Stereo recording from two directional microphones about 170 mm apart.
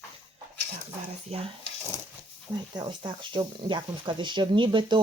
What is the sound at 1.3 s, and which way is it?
Speech, 35° right (ahead or behind).